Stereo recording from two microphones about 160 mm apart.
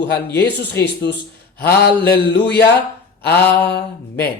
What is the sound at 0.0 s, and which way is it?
Speech, 90° left.